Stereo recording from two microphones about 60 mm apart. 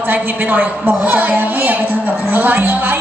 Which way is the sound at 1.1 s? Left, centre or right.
Right.